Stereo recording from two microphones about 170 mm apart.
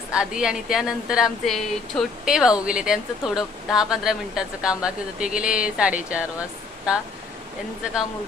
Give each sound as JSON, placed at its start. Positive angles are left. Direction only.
{"t": 0.1, "sound": "speech", "side_deg": -5}